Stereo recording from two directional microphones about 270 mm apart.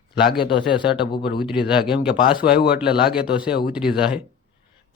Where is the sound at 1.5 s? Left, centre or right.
Centre.